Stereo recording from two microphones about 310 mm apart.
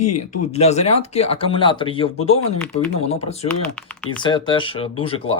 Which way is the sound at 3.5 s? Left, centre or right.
Centre.